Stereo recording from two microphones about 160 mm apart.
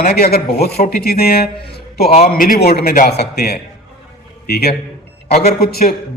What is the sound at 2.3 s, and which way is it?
A man's voice, 60° left (ahead or behind).